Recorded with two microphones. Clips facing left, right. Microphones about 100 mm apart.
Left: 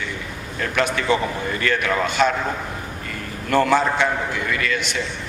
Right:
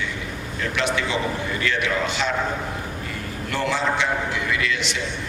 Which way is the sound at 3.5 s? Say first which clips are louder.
Left 6 dB; 50° left (ahead or behind).